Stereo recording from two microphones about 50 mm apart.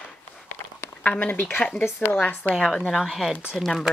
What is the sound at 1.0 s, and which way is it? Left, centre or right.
Speech, left.